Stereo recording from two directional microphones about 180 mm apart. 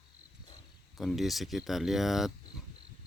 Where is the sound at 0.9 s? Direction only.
Centre (ahead or behind).